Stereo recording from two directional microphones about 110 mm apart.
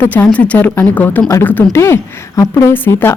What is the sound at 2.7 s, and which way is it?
Speech, 20° left (ahead or behind).